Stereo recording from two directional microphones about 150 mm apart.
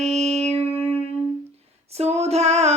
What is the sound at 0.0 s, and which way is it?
Music, 45° right (ahead or behind).